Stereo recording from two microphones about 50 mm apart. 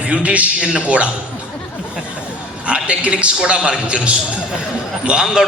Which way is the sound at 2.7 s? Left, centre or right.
Right.